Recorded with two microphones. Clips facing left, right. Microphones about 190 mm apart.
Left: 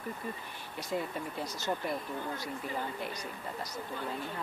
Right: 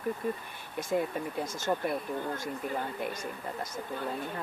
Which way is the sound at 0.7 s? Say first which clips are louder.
Right 5 dB; 50° right (ahead or behind).